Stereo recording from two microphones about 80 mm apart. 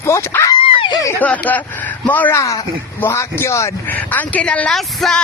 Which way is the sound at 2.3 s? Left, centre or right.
Left.